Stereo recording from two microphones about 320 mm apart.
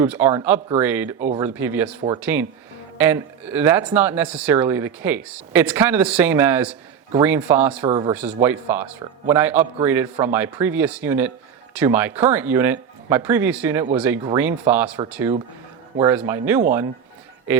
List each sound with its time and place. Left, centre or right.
0.0 s speech: centre
7.9 s speech: centre
8.1 s speech: centre